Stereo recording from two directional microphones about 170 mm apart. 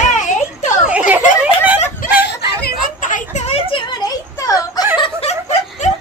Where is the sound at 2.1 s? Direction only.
55° left (ahead or behind); by 3.8 s 35° left (ahead or behind).